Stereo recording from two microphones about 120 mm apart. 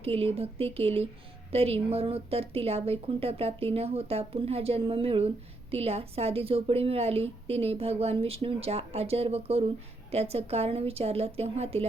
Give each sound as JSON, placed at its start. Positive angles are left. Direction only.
{"t": 0.0, "sound": "a woman's voice", "side_deg": -55}